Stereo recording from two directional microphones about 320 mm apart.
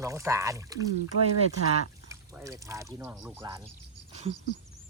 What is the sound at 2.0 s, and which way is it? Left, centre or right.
Speech, centre.